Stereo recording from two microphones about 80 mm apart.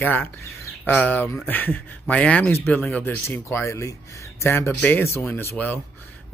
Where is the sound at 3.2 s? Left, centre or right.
Left.